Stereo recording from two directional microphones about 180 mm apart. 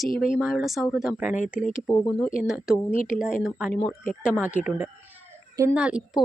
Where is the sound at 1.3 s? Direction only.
45° left (ahead or behind).